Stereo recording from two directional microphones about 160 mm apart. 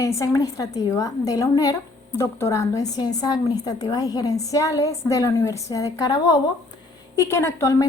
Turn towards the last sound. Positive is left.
turn(degrees=20)  # may be behind; listen again after turning